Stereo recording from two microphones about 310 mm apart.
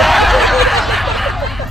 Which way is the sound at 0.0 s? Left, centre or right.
Centre.